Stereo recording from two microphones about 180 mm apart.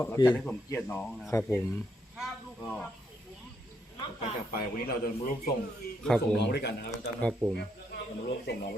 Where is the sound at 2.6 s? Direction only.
5° left (ahead or behind).